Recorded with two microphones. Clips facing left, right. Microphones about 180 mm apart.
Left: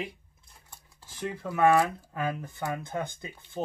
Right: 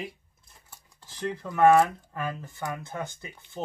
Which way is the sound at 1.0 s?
10° left (ahead or behind).